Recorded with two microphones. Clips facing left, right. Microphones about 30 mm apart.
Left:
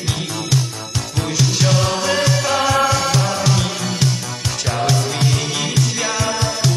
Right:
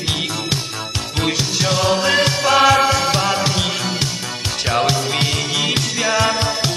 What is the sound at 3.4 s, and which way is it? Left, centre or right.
Music, right.